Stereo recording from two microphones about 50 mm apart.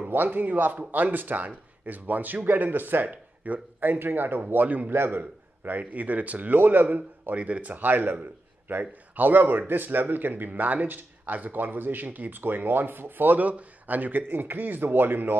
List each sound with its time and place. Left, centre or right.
0.1 s a man's voice: right
3.1 s a man's voice: right
4.9 s a man's voice: right
7.0 s a man's voice: right